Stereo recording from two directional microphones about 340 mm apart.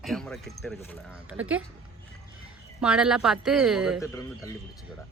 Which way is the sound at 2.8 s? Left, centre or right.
Centre.